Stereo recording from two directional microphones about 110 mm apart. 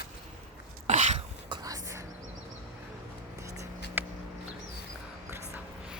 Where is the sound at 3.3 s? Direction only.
30° right (ahead or behind).